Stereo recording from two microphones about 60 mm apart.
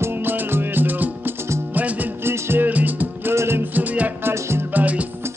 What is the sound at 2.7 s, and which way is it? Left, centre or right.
Music, right.